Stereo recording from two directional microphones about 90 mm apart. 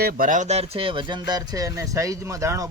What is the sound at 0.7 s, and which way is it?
A man's voice, 85° right.